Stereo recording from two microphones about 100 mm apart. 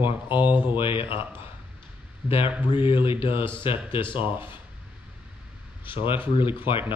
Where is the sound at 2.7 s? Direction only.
60° left (ahead or behind).